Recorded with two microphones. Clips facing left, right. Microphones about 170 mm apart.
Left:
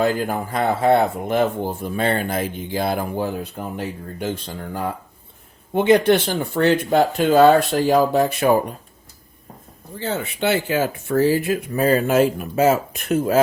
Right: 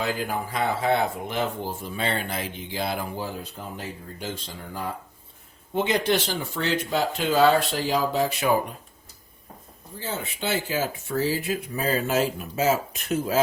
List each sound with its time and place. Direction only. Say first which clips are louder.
0.0 s speech: left 7 dB; 50° left (ahead or behind)
10.0 s speech: left 8 dB; 65° left (ahead or behind)